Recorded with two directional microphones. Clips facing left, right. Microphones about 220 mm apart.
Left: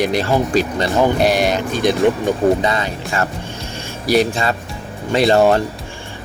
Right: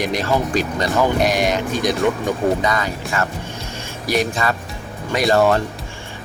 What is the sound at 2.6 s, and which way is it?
Speech, 25° left (ahead or behind).